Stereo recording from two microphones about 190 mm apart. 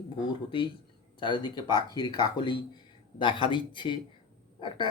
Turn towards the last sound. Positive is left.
turn(degrees=25)  # may be behind; listen again after turning